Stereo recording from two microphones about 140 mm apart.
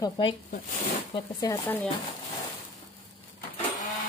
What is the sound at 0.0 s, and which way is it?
Speech, 35° left (ahead or behind).